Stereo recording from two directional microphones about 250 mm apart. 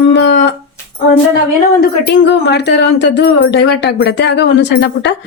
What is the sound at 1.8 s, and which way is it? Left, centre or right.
Speech, left.